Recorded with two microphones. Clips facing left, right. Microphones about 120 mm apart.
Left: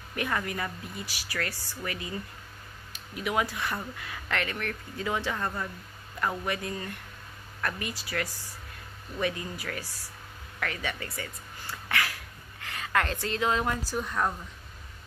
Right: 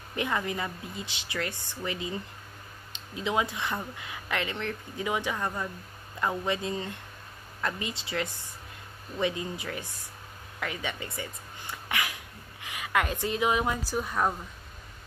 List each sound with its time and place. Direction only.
0.1 s speech: 20° right (ahead or behind)